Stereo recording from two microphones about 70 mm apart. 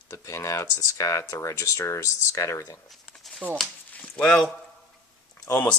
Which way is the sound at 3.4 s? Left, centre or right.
Centre.